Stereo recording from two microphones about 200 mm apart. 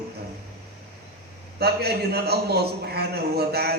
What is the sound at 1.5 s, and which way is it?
A man's voice, 55° right (ahead or behind).